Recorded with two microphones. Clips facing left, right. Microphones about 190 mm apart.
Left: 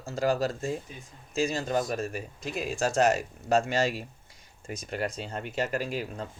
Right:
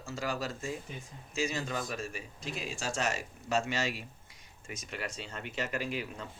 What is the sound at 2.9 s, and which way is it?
Speech, 40° left (ahead or behind).